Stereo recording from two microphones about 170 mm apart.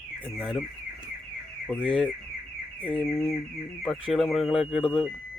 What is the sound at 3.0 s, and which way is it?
Speech, 5° left (ahead or behind).